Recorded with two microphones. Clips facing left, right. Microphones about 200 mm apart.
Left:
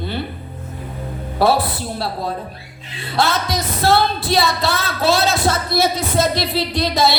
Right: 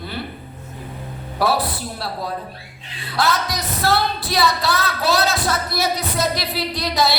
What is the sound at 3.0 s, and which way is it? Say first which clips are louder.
Music: left 2 dB; 25° left (ahead or behind).